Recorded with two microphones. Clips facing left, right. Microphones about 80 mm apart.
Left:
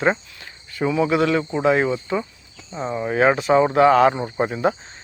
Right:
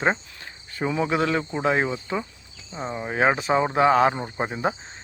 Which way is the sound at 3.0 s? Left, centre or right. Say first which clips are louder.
Left 4 dB; centre.